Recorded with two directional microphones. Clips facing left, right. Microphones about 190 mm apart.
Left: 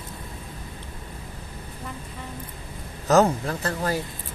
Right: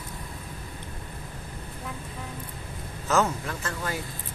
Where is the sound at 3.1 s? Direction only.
35° left (ahead or behind).